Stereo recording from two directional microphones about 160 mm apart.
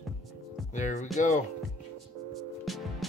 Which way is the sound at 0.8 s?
50° left (ahead or behind).